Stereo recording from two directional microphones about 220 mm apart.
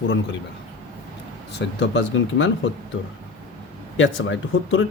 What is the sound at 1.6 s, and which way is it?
Speech, 55° left (ahead or behind).